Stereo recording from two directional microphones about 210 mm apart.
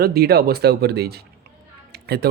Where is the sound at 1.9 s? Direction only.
50° right (ahead or behind).